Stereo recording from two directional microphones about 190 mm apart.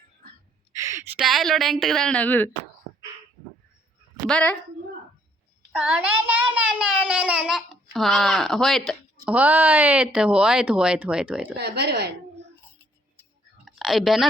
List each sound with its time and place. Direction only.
0.7 s a sound: 15° right (ahead or behind)
1.2 s a child's voice: centre (ahead or behind)
4.3 s a child's voice: 5° left (ahead or behind)
5.7 s a child's voice: 10° right (ahead or behind)
11.5 s speech: 60° right (ahead or behind)
13.7 s a sound: centre (ahead or behind)